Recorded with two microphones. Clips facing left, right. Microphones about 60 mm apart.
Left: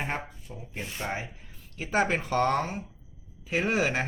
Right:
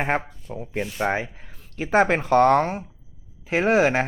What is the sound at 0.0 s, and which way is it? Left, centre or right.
Speech, right.